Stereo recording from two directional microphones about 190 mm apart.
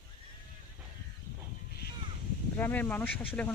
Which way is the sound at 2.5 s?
10° left (ahead or behind).